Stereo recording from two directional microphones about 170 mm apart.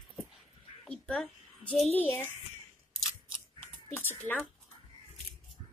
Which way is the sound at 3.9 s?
15° left (ahead or behind).